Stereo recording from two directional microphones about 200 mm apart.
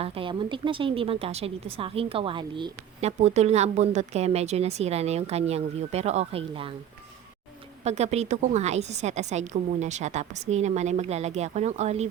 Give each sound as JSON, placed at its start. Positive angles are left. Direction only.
{"t": 0.0, "sound": "speech", "side_deg": -25}
{"t": 3.0, "sound": "a woman's voice", "side_deg": -35}
{"t": 7.9, "sound": "a woman's voice", "side_deg": -35}